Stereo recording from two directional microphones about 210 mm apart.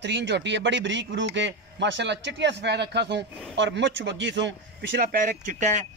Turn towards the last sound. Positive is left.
turn(degrees=-35)  # may be behind; listen again after turning